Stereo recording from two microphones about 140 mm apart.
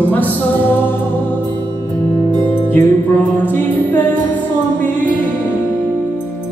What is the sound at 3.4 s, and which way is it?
Music, 15° left (ahead or behind).